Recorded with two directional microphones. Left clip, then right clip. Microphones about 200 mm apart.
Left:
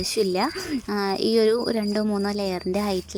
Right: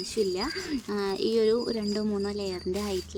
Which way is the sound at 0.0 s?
35° left (ahead or behind).